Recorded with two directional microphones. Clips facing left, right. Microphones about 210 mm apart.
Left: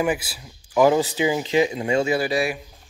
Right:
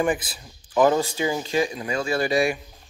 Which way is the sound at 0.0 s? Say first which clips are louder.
Even; 10° left (ahead or behind).